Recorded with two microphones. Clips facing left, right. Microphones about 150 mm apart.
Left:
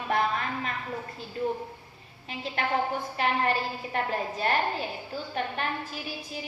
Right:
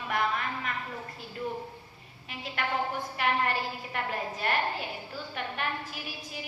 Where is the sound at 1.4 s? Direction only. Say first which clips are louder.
Left 5 dB; 30° left (ahead or behind).